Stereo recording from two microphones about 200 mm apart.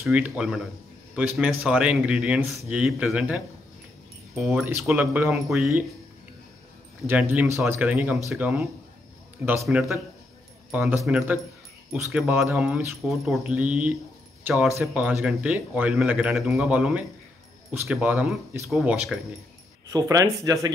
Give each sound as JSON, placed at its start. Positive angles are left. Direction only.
{"t": 0.0, "sound": "speech", "side_deg": -5}
{"t": 7.1, "sound": "speech", "side_deg": -10}
{"t": 19.9, "sound": "speech", "side_deg": -15}